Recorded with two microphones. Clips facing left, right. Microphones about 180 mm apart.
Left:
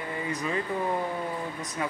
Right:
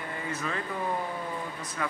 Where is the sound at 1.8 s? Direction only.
20° left (ahead or behind).